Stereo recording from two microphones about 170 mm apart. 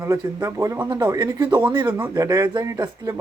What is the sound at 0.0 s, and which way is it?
A man's voice, 15° right (ahead or behind).